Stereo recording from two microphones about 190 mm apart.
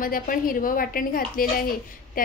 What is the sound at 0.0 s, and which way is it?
A woman's voice, 50° left (ahead or behind).